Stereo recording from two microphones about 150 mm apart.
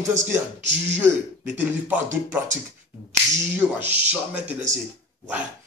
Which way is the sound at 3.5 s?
10° right (ahead or behind).